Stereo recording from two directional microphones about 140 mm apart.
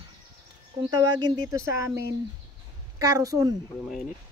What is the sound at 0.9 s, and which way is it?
Speech, 25° right (ahead or behind).